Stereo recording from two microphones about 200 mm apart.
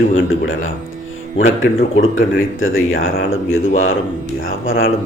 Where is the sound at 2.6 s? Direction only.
90° left.